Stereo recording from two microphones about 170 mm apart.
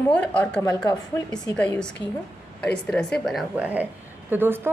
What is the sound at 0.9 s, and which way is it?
Speech, 25° left (ahead or behind).